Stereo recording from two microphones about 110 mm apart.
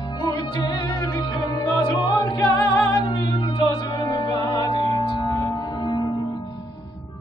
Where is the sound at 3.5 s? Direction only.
40° left (ahead or behind).